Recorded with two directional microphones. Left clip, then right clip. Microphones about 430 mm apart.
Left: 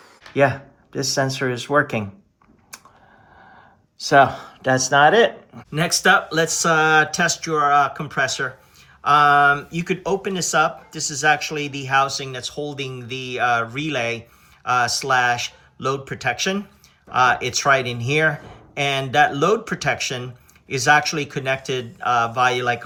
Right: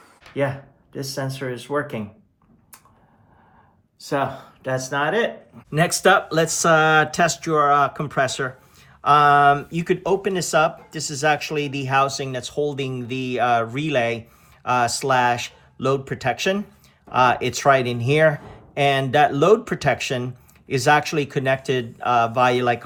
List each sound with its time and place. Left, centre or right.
0.9 s speech: left
4.0 s speech: left
5.7 s speech: centre